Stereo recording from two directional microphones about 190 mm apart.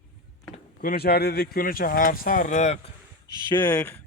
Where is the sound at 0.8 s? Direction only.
50° left (ahead or behind); by 2.9 s 35° left (ahead or behind).